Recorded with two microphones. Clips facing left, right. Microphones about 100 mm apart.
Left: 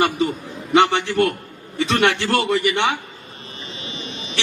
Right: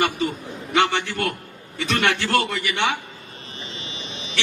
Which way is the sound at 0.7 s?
20° left (ahead or behind).